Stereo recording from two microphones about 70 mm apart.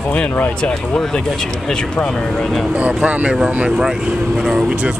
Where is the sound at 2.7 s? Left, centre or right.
Centre.